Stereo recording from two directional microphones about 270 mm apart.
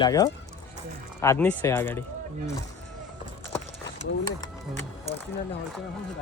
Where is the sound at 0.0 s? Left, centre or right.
Centre.